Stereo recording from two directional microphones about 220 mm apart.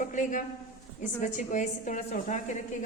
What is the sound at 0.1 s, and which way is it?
A woman's voice, 35° left (ahead or behind).